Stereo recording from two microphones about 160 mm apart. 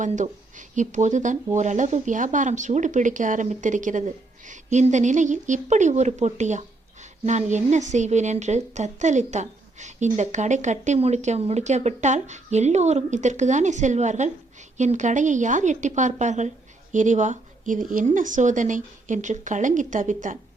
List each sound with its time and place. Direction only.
0.8 s a woman's voice: 50° right (ahead or behind)